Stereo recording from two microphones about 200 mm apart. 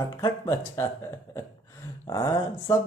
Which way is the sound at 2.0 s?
20° left (ahead or behind).